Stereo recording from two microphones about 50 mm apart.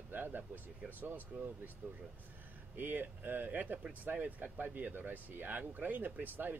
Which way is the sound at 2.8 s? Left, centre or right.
Right.